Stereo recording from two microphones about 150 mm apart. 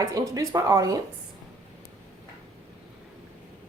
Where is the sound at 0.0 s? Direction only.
20° right (ahead or behind).